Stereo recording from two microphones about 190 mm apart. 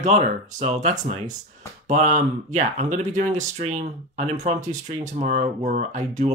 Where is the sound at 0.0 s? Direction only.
35° right (ahead or behind).